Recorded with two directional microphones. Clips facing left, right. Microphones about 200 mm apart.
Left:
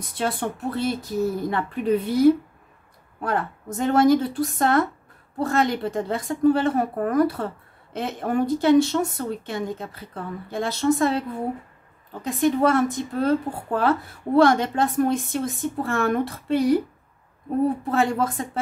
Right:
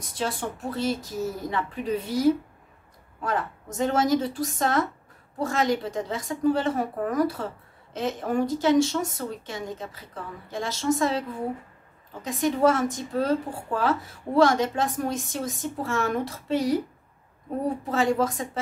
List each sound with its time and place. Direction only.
0.2 s speech: 60° left (ahead or behind)
17.9 s speech: 55° left (ahead or behind)